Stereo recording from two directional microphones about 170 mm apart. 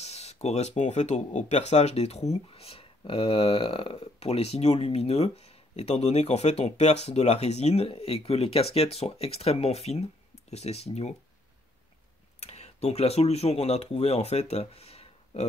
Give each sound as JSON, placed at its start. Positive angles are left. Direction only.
{"t": 0.0, "sound": "speech", "side_deg": 40}
{"t": 12.4, "sound": "speech", "side_deg": 40}